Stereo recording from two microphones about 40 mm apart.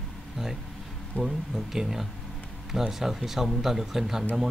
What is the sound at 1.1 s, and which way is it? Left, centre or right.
Speech, left.